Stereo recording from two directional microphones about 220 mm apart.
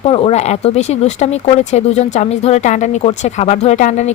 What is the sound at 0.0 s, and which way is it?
Speech, 25° left (ahead or behind).